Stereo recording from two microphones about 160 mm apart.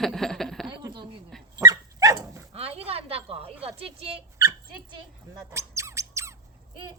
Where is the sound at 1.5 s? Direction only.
20° right (ahead or behind).